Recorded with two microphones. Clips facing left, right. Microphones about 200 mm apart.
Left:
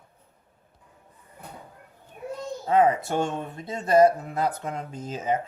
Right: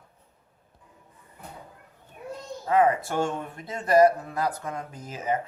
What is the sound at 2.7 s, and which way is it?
Speech, 20° left (ahead or behind).